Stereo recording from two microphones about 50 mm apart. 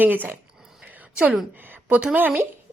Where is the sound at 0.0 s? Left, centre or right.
Right.